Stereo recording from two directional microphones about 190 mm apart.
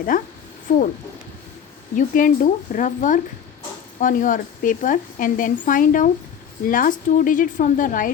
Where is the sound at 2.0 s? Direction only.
45° left (ahead or behind).